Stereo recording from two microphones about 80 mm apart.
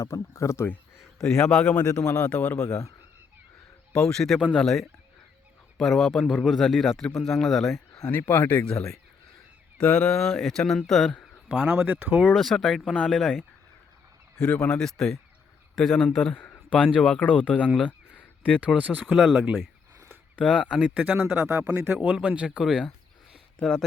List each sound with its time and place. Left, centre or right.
0.0 s speech: left
1.2 s speech: centre
3.9 s speech: centre
8.1 s speech: left
8.6 s speech: centre
11.4 s speech: centre
12.3 s speech: centre
14.3 s speech: centre
16.3 s speech: left
16.7 s speech: centre
17.8 s a sound: centre
18.8 s speech: centre
19.0 s speech: centre
23.6 s speech: centre